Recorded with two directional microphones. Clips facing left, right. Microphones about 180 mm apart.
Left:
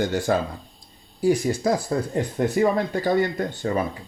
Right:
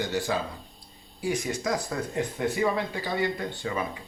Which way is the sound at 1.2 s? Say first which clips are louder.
Left 8 dB; 35° left (ahead or behind).